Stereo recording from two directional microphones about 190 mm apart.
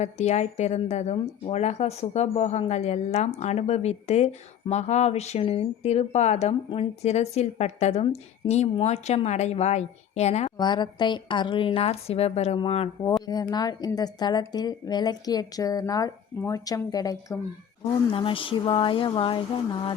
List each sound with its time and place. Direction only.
0.0 s a woman's voice: 35° left (ahead or behind)
10.6 s a woman's voice: 25° left (ahead or behind)
13.2 s a woman's voice: 20° left (ahead or behind)